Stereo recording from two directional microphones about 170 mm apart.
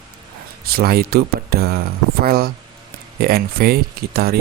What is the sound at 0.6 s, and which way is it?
Speech, 65° right (ahead or behind).